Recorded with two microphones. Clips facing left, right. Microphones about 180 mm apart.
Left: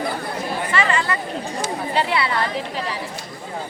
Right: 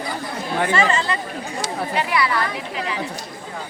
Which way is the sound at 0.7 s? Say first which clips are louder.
Even; 25° right (ahead or behind).